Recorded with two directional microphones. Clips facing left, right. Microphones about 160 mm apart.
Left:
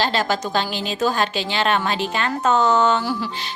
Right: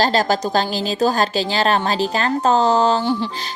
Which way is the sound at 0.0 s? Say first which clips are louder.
Right 4 dB; 40° right (ahead or behind).